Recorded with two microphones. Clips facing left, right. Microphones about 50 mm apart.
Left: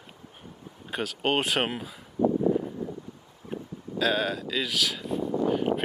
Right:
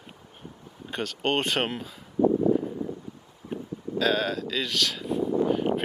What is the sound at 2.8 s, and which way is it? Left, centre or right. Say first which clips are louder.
Wind: right 2 dB; centre.